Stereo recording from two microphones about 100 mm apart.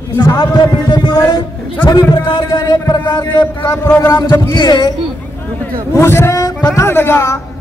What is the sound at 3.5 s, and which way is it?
Speech, 25° left (ahead or behind).